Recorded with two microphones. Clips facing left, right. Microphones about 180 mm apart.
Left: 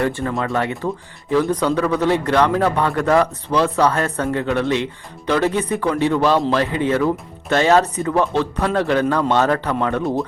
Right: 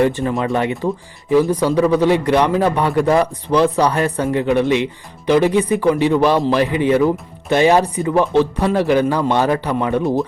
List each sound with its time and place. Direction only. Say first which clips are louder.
0.0 s a man's voice: right 4 dB; 20° right (ahead or behind)